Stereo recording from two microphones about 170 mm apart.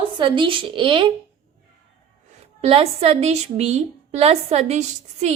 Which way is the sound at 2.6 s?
35° right (ahead or behind).